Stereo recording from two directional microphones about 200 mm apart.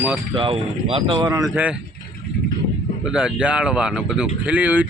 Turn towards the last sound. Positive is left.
turn(degrees=-5)  # may be behind; listen again after turning